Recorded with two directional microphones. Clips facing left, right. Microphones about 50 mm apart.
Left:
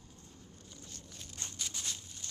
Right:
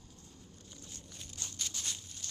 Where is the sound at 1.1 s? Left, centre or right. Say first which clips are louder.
Even; centre.